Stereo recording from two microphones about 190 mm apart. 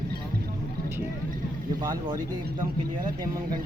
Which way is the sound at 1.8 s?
25° right (ahead or behind).